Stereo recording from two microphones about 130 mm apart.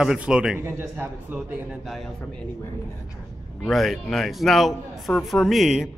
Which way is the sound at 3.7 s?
Centre (ahead or behind).